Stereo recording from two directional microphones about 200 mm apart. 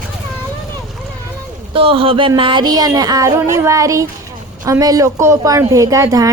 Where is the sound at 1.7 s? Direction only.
25° right (ahead or behind).